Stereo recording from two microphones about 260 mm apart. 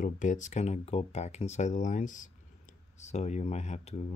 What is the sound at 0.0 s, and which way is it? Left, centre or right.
Speech, left.